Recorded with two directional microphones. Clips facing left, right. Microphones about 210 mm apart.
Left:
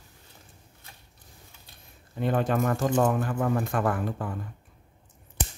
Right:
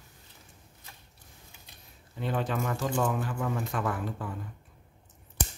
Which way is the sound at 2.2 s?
50° left (ahead or behind).